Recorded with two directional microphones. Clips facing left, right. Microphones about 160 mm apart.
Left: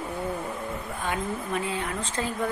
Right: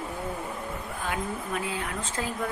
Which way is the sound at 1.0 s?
Centre (ahead or behind).